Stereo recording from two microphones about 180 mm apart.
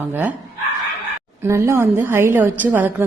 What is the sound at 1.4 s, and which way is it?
A woman's voice, 15° right (ahead or behind).